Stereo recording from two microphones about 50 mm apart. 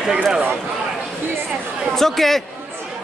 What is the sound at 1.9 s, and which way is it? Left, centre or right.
Speech, centre.